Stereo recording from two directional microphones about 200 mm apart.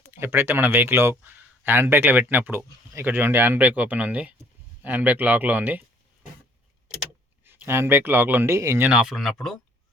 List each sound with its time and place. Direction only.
0.0 s speech: 10° right (ahead or behind)
7.4 s speech: 10° right (ahead or behind)